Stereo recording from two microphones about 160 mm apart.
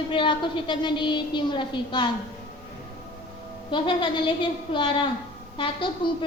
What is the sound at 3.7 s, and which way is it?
A woman's voice, 30° left (ahead or behind).